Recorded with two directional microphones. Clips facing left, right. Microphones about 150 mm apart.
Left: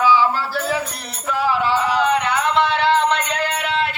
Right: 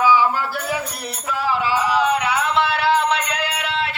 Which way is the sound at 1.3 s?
Centre (ahead or behind).